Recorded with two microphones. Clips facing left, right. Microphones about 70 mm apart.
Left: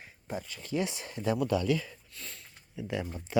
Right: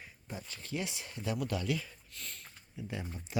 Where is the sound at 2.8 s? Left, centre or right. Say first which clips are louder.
Left 6 dB; left.